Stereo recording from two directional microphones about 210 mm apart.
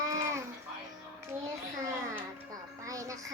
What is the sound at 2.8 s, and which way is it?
Speech, 15° right (ahead or behind).